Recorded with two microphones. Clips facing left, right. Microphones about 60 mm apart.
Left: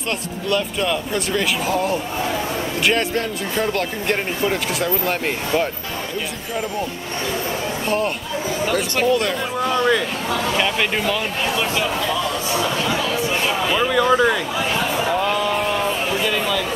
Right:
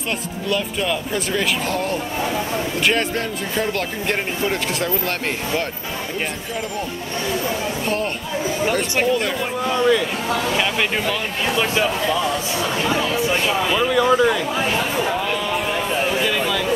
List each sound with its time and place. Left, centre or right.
0.5 s speech: centre
9.0 s speech: centre
11.6 s speech: centre
13.5 s speech: centre
15.0 s music: centre
16.2 s a sound: centre